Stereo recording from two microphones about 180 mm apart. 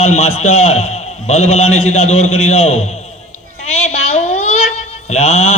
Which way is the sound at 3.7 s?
35° left (ahead or behind).